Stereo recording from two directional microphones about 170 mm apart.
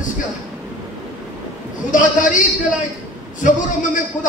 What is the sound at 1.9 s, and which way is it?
A man's voice, 50° left (ahead or behind).